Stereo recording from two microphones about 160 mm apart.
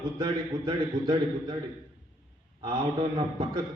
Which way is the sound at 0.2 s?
30° right (ahead or behind).